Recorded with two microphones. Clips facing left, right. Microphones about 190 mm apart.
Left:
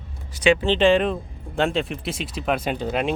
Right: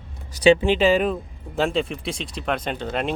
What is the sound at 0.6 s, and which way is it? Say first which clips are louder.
Speech: left 1 dB; 10° right (ahead or behind).